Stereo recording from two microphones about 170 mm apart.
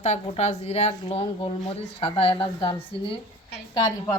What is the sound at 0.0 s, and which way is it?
Speech, 40° left (ahead or behind).